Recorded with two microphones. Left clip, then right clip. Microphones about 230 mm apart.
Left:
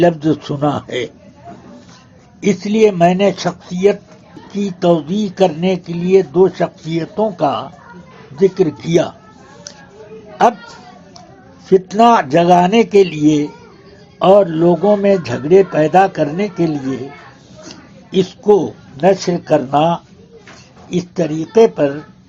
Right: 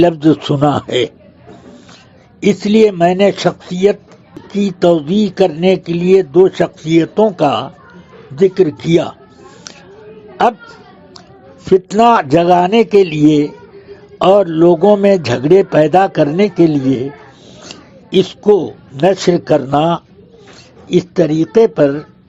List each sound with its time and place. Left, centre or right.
0.0 s speech: right
2.4 s speech: right
10.4 s speech: right
11.6 s a woman's voice: right